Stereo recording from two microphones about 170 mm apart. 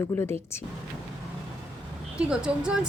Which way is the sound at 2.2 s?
5° right (ahead or behind).